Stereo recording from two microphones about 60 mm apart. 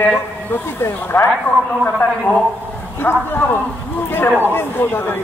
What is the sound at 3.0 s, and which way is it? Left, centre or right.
A man's voice, left.